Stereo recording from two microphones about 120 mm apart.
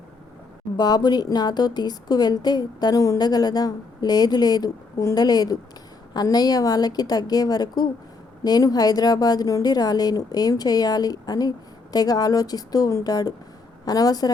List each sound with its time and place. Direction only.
0.8 s a woman's voice: 35° left (ahead or behind)